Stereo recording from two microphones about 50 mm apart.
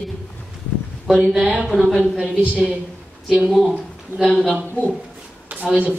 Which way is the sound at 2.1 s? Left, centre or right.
Centre.